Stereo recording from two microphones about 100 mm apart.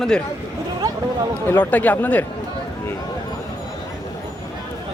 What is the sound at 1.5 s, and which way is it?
Speech, 15° left (ahead or behind).